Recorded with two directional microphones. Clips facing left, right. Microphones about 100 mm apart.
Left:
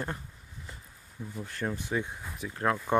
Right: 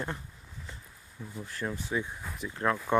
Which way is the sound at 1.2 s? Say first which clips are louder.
Left 2 dB; 15° left (ahead or behind).